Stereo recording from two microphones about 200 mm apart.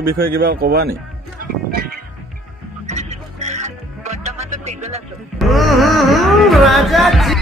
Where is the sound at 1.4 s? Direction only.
50° right (ahead or behind).